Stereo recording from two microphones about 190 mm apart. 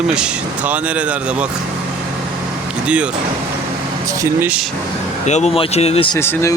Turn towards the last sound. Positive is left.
turn(degrees=15)  # may be behind; listen again after turning